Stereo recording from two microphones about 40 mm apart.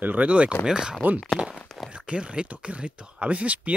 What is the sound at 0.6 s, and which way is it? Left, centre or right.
Speech, right.